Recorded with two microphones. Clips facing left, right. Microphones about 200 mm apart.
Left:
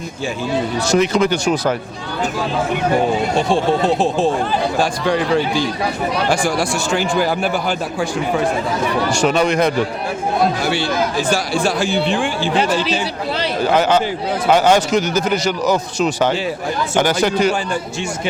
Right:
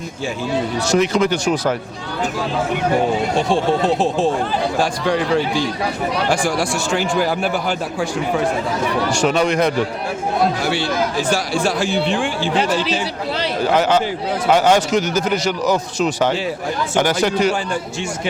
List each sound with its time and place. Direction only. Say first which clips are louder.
1.1 s speech: left 1 dB; 35° left (ahead or behind)
2.8 s a man's voice: left 1 dB; 25° left (ahead or behind)
17.1 s speech: left 1 dB; 20° left (ahead or behind)